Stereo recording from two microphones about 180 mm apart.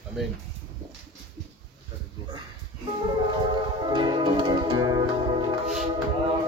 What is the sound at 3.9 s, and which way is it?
Music, 25° right (ahead or behind).